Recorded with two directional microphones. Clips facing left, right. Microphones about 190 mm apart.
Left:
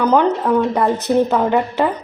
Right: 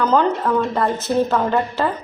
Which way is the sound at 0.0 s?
15° left (ahead or behind).